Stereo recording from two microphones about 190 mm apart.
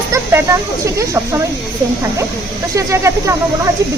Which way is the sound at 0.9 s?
15° right (ahead or behind).